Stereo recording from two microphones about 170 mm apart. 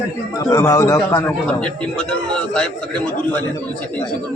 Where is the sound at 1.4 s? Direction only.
5° left (ahead or behind).